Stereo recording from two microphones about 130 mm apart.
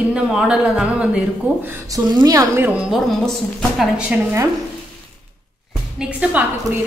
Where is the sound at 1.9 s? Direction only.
30° right (ahead or behind).